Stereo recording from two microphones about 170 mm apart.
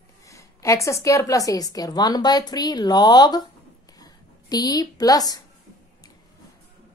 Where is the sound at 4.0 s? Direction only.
25° left (ahead or behind).